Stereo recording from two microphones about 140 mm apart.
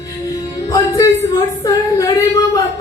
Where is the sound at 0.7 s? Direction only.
25° left (ahead or behind).